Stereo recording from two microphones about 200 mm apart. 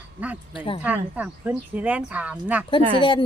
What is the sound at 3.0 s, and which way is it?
Speech, 25° left (ahead or behind).